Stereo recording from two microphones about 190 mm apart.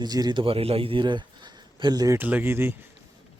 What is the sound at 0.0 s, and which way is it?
A man's voice, 20° right (ahead or behind).